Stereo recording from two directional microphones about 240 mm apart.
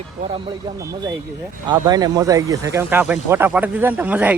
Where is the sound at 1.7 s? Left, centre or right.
Centre.